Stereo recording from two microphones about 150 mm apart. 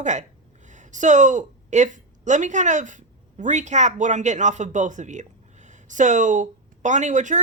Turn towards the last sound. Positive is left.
turn(degrees=-55)  # may be behind; listen again after turning